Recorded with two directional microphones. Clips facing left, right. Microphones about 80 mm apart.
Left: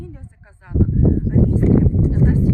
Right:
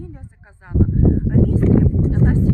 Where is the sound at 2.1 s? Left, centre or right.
Right.